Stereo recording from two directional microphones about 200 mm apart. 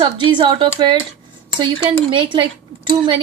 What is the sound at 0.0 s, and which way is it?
Speech, 25° right (ahead or behind).